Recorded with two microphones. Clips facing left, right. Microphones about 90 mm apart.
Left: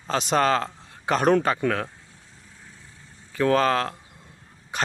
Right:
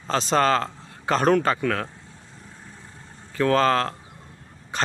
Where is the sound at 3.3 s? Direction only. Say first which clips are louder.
Right 1 dB; 15° left (ahead or behind).